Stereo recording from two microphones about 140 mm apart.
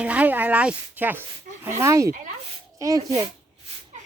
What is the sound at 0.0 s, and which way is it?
Speech, 10° right (ahead or behind).